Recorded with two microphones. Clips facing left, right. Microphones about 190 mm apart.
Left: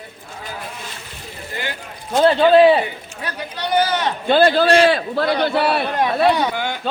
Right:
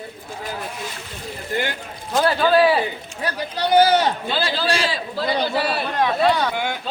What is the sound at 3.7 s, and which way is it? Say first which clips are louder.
Speech: right 4 dB; 35° right (ahead or behind).